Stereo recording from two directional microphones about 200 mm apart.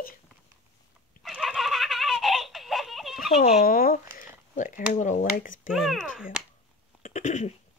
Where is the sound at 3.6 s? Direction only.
45° left (ahead or behind).